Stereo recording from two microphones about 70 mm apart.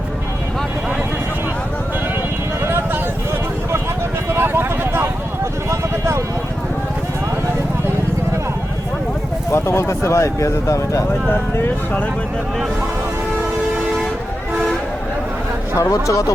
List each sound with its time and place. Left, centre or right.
2.6 s a sound: right
4.4 s vehicle: right
9.5 s speech: left
11.3 s speech: left
15.7 s speech: left